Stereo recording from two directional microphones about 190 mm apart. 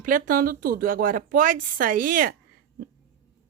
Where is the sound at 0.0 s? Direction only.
45° right (ahead or behind).